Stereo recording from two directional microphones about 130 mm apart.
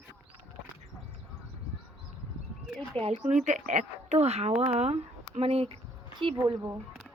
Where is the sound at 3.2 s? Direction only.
65° right (ahead or behind); by 5.7 s 50° right (ahead or behind).